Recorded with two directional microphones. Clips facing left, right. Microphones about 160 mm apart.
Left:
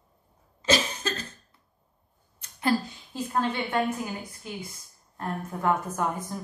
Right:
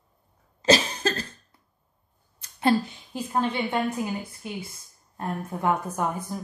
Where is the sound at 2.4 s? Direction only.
25° right (ahead or behind).